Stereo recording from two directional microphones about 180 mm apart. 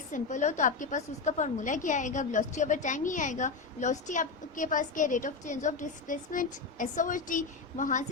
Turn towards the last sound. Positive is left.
turn(degrees=45)  # may be behind; listen again after turning